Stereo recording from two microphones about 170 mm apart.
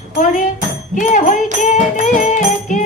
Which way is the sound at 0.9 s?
50° left (ahead or behind).